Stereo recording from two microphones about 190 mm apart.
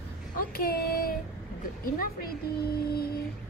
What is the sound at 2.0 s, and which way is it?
A woman's voice, 55° left (ahead or behind).